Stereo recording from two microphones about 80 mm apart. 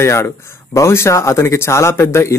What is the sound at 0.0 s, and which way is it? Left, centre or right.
Speech, left.